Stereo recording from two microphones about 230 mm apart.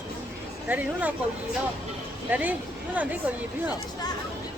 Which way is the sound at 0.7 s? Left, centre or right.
Centre.